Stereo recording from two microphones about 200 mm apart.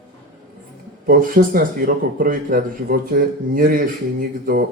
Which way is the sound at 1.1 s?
45° right (ahead or behind).